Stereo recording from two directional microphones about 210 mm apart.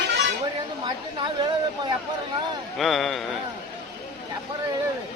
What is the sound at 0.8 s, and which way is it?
A woman's voice, 20° right (ahead or behind).